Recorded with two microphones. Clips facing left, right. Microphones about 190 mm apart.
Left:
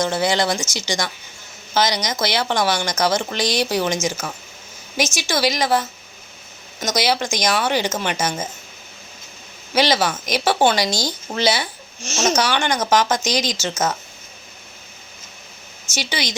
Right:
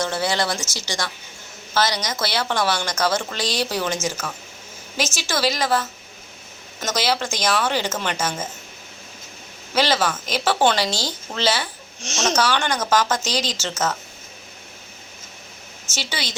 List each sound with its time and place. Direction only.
0.0 s speech: 15° left (ahead or behind)
9.7 s speech: 15° left (ahead or behind)
11.9 s speech: 5° left (ahead or behind)
12.4 s speech: 15° left (ahead or behind)
16.0 s speech: 15° left (ahead or behind)